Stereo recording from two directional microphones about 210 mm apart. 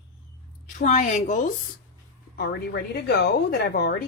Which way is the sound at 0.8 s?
35° left (ahead or behind).